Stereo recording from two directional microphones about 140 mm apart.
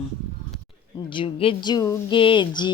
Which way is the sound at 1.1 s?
40° left (ahead or behind).